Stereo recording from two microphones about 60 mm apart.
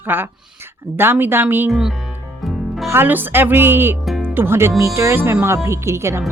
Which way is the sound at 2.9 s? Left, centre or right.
Right.